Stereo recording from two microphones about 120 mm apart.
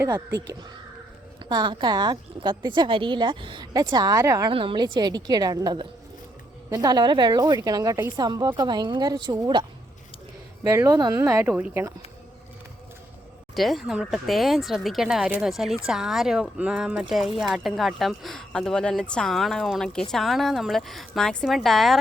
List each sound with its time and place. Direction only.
1.5 s a woman's voice: 35° right (ahead or behind)
4.5 s a woman's voice: 45° right (ahead or behind)
10.6 s speech: 25° right (ahead or behind)
13.6 s speech: centre (ahead or behind)